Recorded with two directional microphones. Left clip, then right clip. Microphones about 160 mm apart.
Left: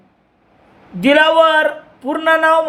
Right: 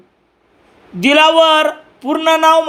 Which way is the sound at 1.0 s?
25° right (ahead or behind).